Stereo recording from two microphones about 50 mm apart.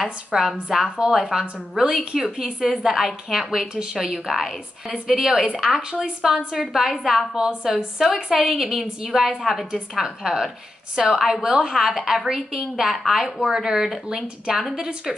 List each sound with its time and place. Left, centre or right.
0.3 s a woman's voice: centre
5.8 s a woman's voice: centre
9.7 s a woman's voice: centre